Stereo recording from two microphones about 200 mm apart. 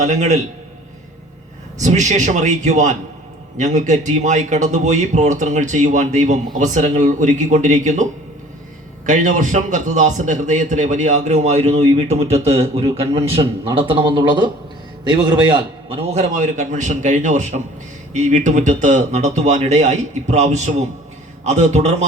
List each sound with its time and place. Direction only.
0.0 s a man's voice: 35° right (ahead or behind)
1.8 s a man's voice: 35° right (ahead or behind)
9.0 s a man's voice: 40° right (ahead or behind)